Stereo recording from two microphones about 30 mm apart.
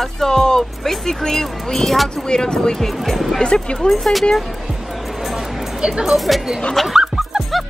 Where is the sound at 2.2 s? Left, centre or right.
Left.